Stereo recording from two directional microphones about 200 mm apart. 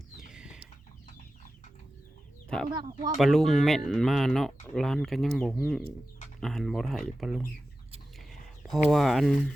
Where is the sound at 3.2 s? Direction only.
Centre (ahead or behind).